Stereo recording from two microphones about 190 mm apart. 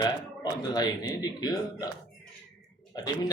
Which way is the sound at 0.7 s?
20° left (ahead or behind).